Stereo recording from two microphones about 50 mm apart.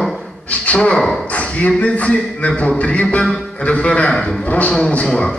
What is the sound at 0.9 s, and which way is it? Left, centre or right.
Speech, centre.